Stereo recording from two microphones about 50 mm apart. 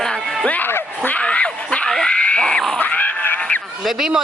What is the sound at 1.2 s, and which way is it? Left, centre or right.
Dog, left.